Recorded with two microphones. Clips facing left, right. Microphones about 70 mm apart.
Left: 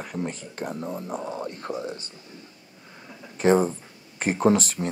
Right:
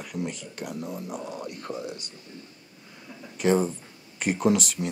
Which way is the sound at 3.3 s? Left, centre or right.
Left.